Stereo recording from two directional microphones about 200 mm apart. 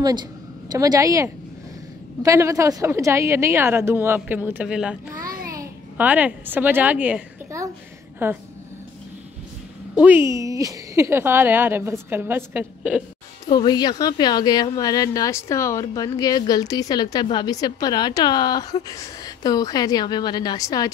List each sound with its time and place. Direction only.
0.7 s speech: 20° right (ahead or behind)
5.1 s child singing: 15° right (ahead or behind)
5.5 s a child's voice: 10° right (ahead or behind)
9.9 s speech: 10° right (ahead or behind)
13.5 s a woman's voice: 20° left (ahead or behind)